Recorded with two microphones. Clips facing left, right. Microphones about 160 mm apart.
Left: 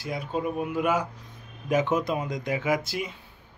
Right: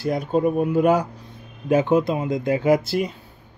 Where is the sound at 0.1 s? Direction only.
40° right (ahead or behind).